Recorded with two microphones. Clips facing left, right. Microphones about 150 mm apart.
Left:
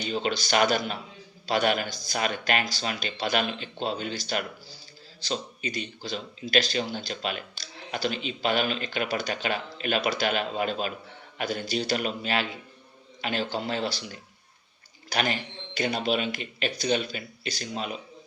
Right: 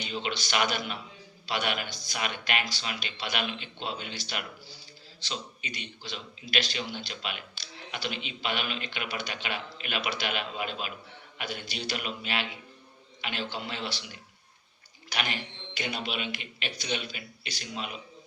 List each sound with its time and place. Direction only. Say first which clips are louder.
0.0 s speech: left 5 dB; 40° left (ahead or behind)